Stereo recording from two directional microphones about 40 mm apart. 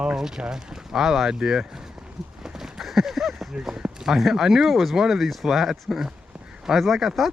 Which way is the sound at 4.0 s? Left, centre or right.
Centre.